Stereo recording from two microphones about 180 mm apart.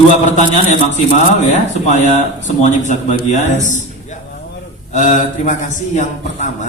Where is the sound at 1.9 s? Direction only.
40° left (ahead or behind).